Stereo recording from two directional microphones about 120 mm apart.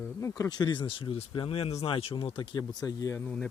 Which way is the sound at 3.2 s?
10° left (ahead or behind).